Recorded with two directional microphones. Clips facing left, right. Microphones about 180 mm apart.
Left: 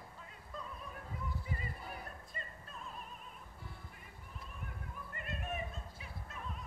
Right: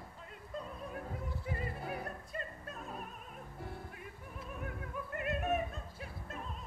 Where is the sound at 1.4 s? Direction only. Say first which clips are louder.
Right 5 dB; 60° right (ahead or behind).